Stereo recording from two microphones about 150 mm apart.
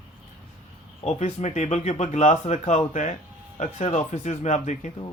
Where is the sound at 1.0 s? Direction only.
50° left (ahead or behind).